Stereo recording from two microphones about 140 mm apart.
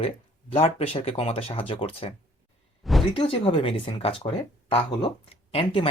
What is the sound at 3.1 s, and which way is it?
Speech, 40° left (ahead or behind).